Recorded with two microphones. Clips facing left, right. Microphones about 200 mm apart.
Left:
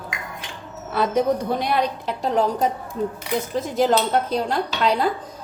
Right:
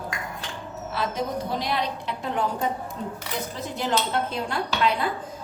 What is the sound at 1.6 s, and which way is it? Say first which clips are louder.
Speech: left 5 dB; 55° left (ahead or behind).